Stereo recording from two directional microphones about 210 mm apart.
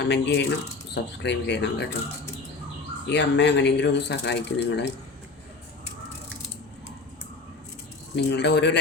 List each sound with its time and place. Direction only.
0.0 s speech: 55° left (ahead or behind)
3.1 s speech: 55° left (ahead or behind)
8.1 s speech: 55° left (ahead or behind)